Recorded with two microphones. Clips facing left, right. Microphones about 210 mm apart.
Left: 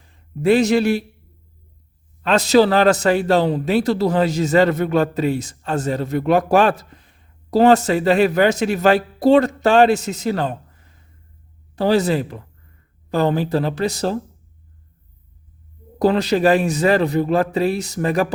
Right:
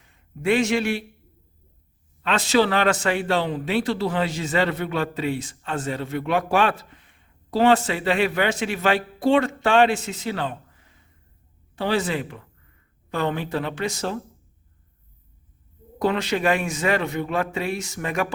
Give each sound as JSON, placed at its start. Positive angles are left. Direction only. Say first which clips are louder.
{"t": 0.0, "sound": "speech", "louder": "left 6 dB", "side_deg": 35}
{"t": 2.2, "sound": "a man's voice", "louder": "left 6 dB", "side_deg": 40}
{"t": 16.0, "sound": "a man's voice", "louder": "left 6 dB", "side_deg": 35}